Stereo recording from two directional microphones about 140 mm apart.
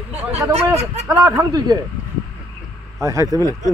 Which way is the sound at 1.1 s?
25° right (ahead or behind).